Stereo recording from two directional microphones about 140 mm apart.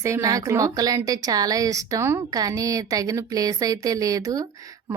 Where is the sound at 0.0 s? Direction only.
20° right (ahead or behind).